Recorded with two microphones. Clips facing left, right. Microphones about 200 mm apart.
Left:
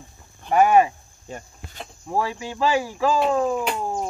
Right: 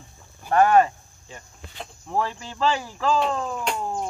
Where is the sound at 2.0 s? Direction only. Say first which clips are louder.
Left 2 dB; 10° left (ahead or behind).